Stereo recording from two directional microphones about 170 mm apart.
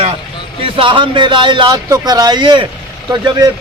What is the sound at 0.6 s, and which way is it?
A man's voice, 30° right (ahead or behind).